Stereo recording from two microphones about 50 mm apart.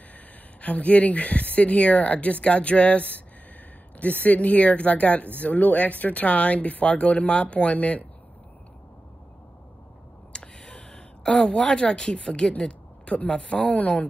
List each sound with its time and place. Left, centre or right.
0.6 s speech: left
10.3 s speech: centre